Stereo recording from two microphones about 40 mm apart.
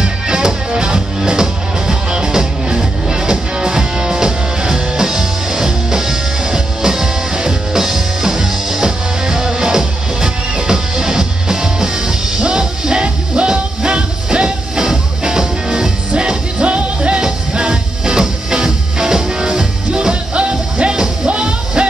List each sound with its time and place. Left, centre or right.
0.0 s music: centre
17.2 s music: right